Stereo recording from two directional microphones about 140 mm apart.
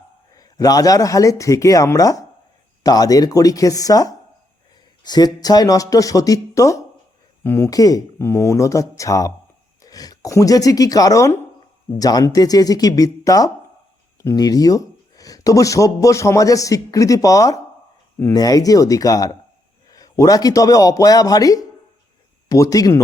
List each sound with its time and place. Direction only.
0.3 s speech: 25° left (ahead or behind)